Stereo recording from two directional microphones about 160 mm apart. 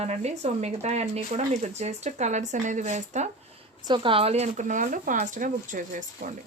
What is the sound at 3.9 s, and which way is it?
Speech, 30° right (ahead or behind).